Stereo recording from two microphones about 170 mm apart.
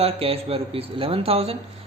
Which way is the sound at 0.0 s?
35° right (ahead or behind).